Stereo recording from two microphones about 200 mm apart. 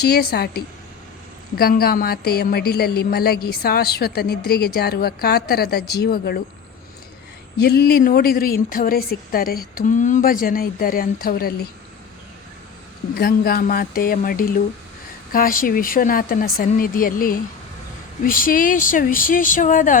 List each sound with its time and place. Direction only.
0.0 s a woman's voice: 50° left (ahead or behind)
7.6 s a woman's voice: 50° left (ahead or behind)
13.1 s a woman's voice: 50° left (ahead or behind)